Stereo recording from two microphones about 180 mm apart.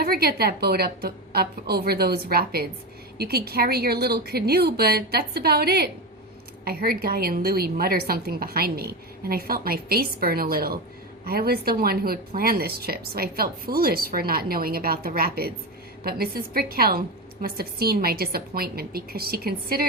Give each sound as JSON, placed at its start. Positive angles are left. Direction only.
{"t": 0.0, "sound": "speech", "side_deg": -60}